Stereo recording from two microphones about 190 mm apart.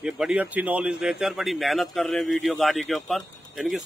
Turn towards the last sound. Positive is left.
turn(degrees=0)  # may be behind; listen again after turning